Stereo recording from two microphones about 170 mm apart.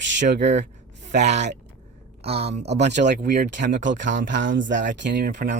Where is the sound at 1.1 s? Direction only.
40° right (ahead or behind).